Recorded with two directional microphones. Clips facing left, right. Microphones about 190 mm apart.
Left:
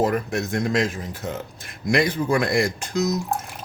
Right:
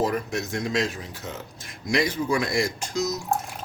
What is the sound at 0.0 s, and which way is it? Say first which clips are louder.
Speech: left 3 dB; 55° left (ahead or behind).